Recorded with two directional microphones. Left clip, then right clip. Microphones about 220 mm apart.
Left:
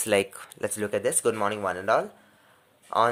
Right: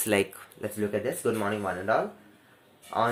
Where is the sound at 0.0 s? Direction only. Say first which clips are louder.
Left 2 dB; 30° left (ahead or behind).